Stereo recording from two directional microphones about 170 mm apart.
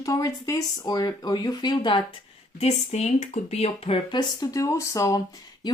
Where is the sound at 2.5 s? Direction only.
40° left (ahead or behind); by 5.2 s 20° left (ahead or behind).